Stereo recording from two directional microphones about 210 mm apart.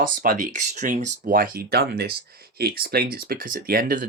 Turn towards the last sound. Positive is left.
turn(degrees=-40)  # may be behind; listen again after turning